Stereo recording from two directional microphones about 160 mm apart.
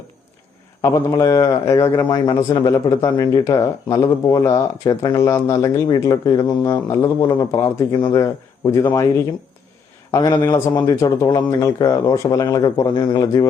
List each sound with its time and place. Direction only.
0.8 s speech: 20° left (ahead or behind)
10.1 s speech: 20° left (ahead or behind)